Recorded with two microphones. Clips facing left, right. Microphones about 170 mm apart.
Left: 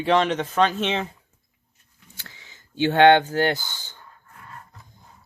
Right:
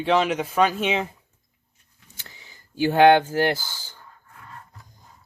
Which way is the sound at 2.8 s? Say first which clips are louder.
Even; 10° right (ahead or behind).